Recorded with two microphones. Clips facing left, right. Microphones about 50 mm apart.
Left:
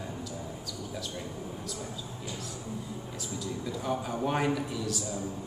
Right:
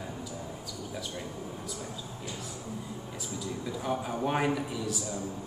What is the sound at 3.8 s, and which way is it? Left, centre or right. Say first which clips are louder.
Speech: even; centre.